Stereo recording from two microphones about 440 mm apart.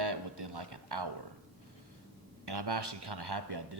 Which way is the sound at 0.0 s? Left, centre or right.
Right.